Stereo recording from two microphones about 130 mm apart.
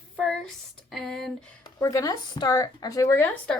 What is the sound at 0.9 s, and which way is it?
Speech, centre (ahead or behind).